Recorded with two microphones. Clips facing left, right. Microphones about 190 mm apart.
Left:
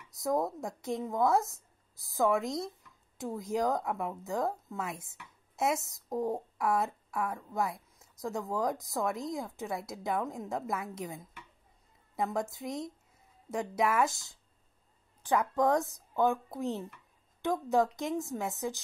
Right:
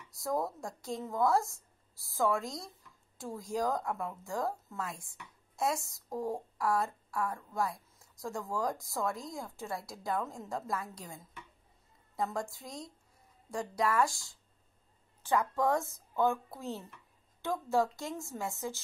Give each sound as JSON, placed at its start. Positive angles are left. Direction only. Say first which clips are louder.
{"t": 0.1, "sound": "a woman's voice", "louder": "left 3 dB", "side_deg": 20}